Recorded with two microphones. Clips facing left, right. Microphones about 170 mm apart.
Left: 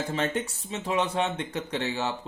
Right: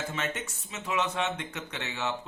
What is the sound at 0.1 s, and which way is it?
Speech, 35° left (ahead or behind).